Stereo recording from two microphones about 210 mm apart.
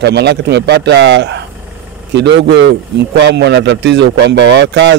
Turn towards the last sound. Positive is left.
turn(degrees=-55)  # may be behind; listen again after turning